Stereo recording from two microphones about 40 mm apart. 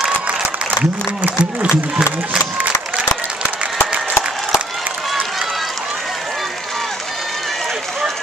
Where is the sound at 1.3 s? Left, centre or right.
Right.